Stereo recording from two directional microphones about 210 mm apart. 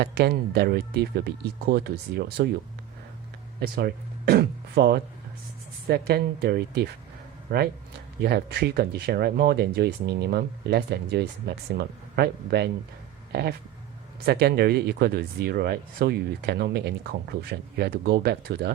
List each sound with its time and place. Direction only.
0.0 s speech: 50° right (ahead or behind)
3.8 s speech: 45° right (ahead or behind)